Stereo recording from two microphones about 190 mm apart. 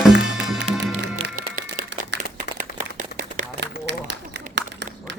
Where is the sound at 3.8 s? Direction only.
65° right (ahead or behind).